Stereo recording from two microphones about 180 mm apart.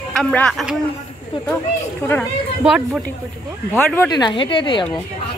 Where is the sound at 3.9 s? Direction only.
10° left (ahead or behind).